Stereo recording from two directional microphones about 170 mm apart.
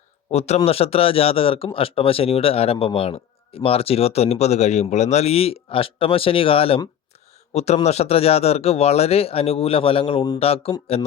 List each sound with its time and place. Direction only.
0.3 s speech: 40° left (ahead or behind)